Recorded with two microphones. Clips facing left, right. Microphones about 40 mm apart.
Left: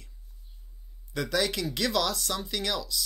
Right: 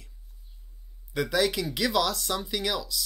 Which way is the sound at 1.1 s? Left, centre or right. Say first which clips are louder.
Right 3 dB; centre.